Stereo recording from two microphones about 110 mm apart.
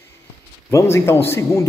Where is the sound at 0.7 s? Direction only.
25° left (ahead or behind).